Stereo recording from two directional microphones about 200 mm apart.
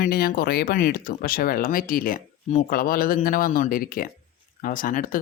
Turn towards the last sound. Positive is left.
turn(degrees=45)  # may be behind; listen again after turning